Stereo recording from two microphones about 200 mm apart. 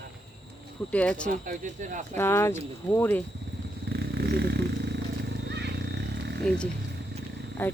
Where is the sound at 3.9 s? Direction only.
55° right (ahead or behind).